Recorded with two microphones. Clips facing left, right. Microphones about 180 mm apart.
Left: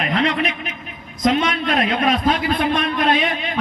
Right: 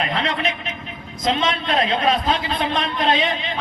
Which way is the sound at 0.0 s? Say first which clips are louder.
Left 3 dB; 25° right (ahead or behind).